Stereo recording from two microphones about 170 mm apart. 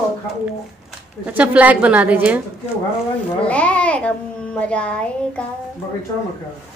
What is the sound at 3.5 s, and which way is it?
Babbling, 5° left (ahead or behind).